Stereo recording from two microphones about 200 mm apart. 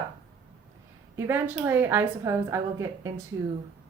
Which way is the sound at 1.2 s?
10° right (ahead or behind).